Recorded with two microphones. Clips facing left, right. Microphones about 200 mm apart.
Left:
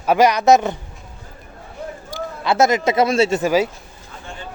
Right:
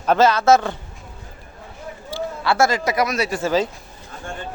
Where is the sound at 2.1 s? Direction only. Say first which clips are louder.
Even; 20° left (ahead or behind).